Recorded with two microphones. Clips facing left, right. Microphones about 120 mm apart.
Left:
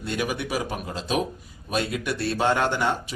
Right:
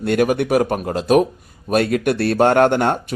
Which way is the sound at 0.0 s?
55° right (ahead or behind).